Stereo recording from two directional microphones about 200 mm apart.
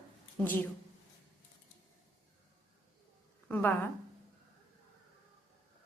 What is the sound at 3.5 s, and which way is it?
Speech, 10° left (ahead or behind).